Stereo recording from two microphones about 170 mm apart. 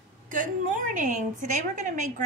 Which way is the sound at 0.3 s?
50° right (ahead or behind).